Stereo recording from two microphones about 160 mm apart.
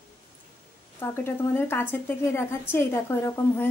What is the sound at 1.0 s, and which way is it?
A woman's voice, 15° left (ahead or behind).